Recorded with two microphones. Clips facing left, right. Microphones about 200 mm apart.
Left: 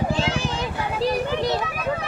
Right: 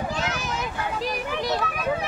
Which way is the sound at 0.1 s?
30° left (ahead or behind).